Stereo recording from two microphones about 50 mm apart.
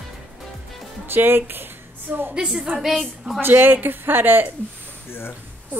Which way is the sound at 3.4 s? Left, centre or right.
Right.